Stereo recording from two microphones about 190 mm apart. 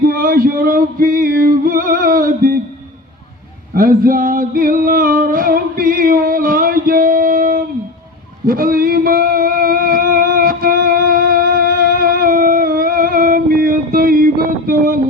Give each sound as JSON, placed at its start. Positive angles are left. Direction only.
{"t": 0.1, "sound": "music", "side_deg": -45}
{"t": 3.8, "sound": "a sound", "side_deg": -45}
{"t": 8.4, "sound": "music", "side_deg": -50}